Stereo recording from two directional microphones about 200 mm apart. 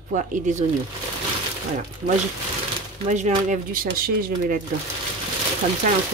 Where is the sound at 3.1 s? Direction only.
40° right (ahead or behind).